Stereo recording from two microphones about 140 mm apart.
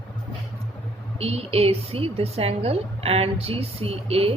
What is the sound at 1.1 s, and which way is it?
A woman's voice, 45° right (ahead or behind).